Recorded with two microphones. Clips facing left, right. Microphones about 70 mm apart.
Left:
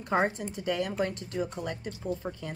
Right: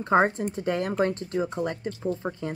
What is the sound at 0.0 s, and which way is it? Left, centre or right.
Speech, right.